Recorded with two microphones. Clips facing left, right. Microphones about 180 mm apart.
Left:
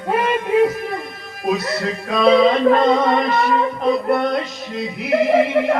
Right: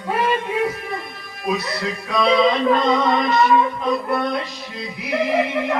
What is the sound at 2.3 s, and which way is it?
Music, 25° left (ahead or behind).